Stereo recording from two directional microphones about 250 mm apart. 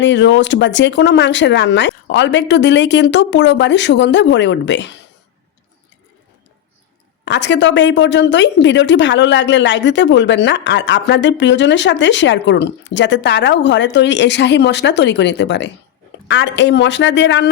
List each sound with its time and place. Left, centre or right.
0.0 s speech: left
7.3 s speech: left